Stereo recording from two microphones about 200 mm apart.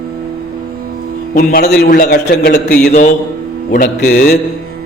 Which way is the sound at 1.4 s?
55° left (ahead or behind).